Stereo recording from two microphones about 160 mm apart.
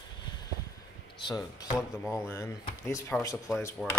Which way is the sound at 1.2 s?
25° left (ahead or behind).